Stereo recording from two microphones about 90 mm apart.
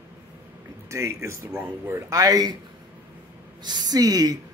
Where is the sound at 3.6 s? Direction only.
50° right (ahead or behind).